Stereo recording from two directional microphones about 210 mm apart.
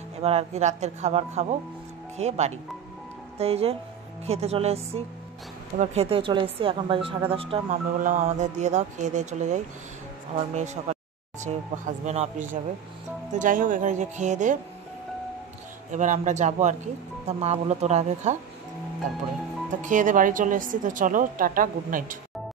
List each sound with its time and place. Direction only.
0.2 s speech: 30° right (ahead or behind)
8.0 s speech: 40° right (ahead or behind)
15.9 s speech: 35° right (ahead or behind)
19.8 s speech: 40° right (ahead or behind)